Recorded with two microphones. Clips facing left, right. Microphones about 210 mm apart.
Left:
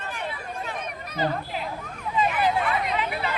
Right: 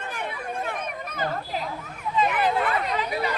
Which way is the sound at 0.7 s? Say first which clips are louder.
Right 2 dB; 50° right (ahead or behind).